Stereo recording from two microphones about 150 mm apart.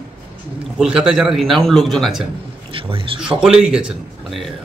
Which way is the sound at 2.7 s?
35° right (ahead or behind).